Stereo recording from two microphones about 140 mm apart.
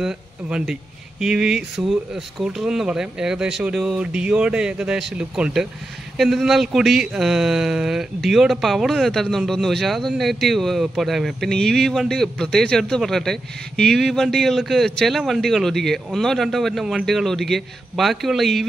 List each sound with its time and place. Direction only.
0.0 s speech: 5° right (ahead or behind)